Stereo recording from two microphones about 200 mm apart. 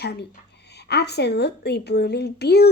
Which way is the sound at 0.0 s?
55° left (ahead or behind).